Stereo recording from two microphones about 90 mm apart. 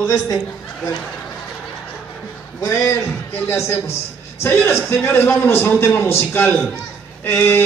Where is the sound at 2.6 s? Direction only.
35° left (ahead or behind).